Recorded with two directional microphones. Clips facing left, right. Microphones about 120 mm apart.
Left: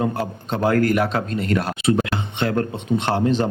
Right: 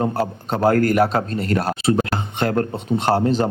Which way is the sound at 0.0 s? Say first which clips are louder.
Right 2 dB; 35° right (ahead or behind).